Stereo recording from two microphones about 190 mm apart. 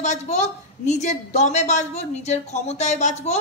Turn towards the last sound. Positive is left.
turn(degrees=35)  # may be behind; listen again after turning